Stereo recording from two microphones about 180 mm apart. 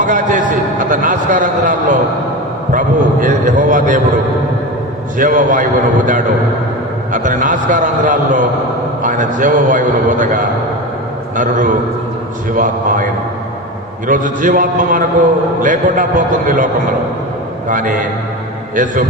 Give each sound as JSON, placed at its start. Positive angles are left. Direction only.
{"t": 0.0, "sound": "a man's voice", "side_deg": -45}
{"t": 5.1, "sound": "a man's voice", "side_deg": -50}
{"t": 7.1, "sound": "a man's voice", "side_deg": -45}
{"t": 14.1, "sound": "a man's voice", "side_deg": -45}
{"t": 17.7, "sound": "a man's voice", "side_deg": -45}